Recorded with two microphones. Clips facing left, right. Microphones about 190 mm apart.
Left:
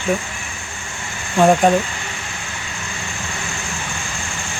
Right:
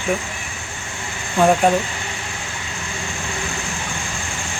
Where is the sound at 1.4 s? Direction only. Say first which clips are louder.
Left 2 dB; 5° left (ahead or behind).